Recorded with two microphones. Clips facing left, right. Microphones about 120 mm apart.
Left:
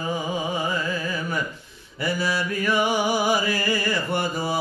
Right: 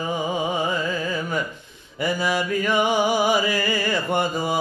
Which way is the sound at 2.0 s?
20° right (ahead or behind).